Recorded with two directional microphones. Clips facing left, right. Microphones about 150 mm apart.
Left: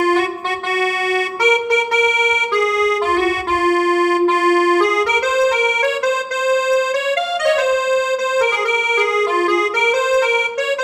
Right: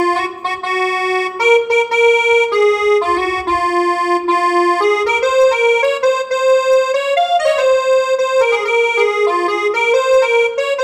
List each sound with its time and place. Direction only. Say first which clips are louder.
1.5 s music: right 6 dB; 30° right (ahead or behind)
4.5 s music: right 1 dB; 30° right (ahead or behind)